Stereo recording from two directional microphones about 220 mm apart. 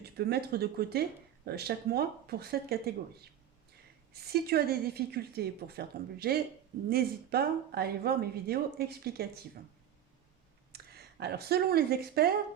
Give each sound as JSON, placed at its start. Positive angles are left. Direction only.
{"t": 0.0, "sound": "a woman's voice", "side_deg": -45}
{"t": 10.7, "sound": "speech", "side_deg": -45}